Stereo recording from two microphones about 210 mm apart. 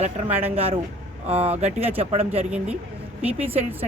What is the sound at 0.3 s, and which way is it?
Speech, 10° right (ahead or behind).